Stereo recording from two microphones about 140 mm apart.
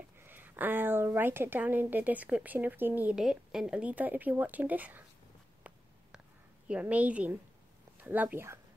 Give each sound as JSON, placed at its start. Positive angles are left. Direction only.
{"t": 0.2, "sound": "a woman's voice", "side_deg": -15}
{"t": 6.7, "sound": "a woman's voice", "side_deg": -10}